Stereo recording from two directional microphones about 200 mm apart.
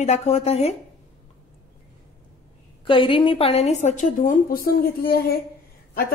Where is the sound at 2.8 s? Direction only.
25° left (ahead or behind).